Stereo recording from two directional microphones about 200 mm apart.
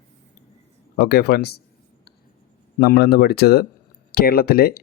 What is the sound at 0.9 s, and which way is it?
Speech, 50° left (ahead or behind).